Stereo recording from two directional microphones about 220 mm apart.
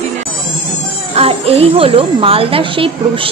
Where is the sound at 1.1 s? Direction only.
25° right (ahead or behind).